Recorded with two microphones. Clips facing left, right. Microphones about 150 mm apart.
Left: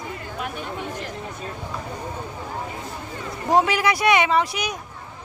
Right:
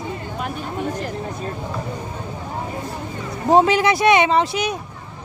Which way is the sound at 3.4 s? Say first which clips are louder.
Right 5 dB; 25° right (ahead or behind).